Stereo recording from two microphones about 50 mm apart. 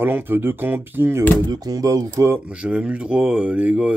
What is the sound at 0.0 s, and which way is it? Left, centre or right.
Speech, right.